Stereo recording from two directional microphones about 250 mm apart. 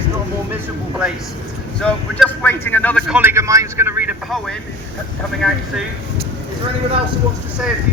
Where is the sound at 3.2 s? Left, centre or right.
Centre.